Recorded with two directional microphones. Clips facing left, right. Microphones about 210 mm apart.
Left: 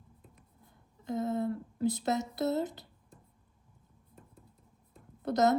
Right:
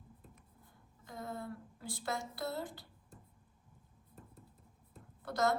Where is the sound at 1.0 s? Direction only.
20° left (ahead or behind).